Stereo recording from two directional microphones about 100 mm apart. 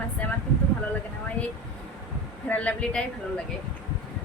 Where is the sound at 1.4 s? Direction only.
15° left (ahead or behind).